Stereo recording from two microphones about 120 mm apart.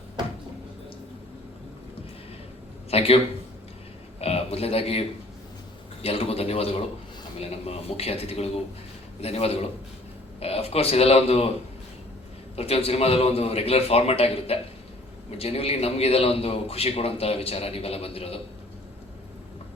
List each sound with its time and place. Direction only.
2.9 s a man's voice: 55° left (ahead or behind)
4.2 s a man's voice: 60° left (ahead or behind)
12.5 s a man's voice: 60° left (ahead or behind)